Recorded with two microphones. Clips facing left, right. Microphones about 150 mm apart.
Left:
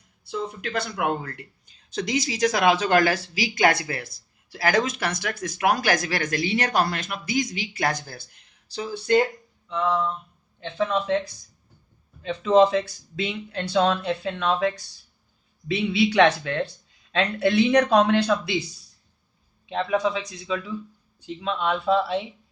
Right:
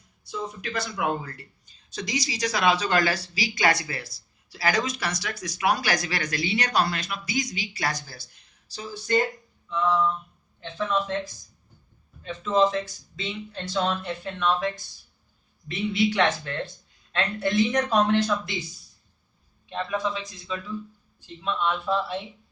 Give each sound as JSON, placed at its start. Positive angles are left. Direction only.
{"t": 0.3, "sound": "speech", "side_deg": 60}
{"t": 10.6, "sound": "speech", "side_deg": 60}
{"t": 12.2, "sound": "speech", "side_deg": 75}
{"t": 15.6, "sound": "speech", "side_deg": 80}
{"t": 19.6, "sound": "a man's voice", "side_deg": 80}